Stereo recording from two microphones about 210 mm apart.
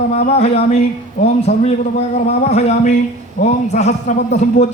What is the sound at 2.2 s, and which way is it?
A man's voice, 30° left (ahead or behind).